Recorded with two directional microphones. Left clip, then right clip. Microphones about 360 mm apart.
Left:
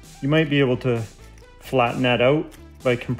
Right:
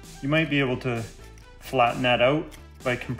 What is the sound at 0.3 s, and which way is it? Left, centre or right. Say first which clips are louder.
Speech: left 4 dB; centre.